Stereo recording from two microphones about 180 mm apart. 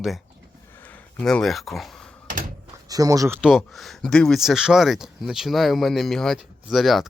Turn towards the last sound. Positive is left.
turn(degrees=0)  # may be behind; listen again after turning